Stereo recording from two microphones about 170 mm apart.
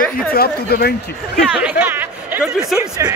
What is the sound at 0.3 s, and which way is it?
Speech, 65° left (ahead or behind).